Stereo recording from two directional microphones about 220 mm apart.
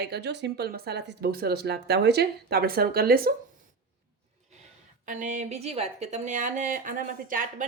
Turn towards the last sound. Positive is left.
turn(degrees=-40)  # may be behind; listen again after turning